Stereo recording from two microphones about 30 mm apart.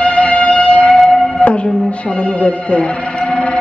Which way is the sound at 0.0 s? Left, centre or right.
Left.